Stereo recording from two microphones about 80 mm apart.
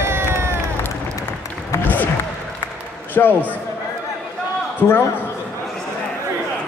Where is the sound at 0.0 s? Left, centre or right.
Right.